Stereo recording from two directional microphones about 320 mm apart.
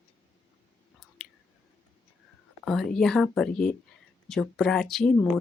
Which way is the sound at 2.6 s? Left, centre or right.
Centre.